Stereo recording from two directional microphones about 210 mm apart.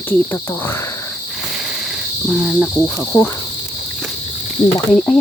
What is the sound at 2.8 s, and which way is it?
Speech, 10° left (ahead or behind).